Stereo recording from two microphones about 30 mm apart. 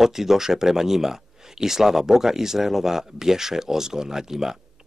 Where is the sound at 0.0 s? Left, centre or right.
Centre.